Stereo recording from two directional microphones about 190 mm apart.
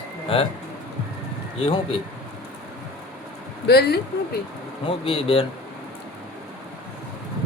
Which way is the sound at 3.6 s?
60° left (ahead or behind).